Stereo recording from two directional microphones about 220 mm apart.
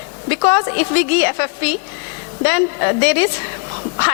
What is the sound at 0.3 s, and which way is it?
A woman's voice, 15° left (ahead or behind).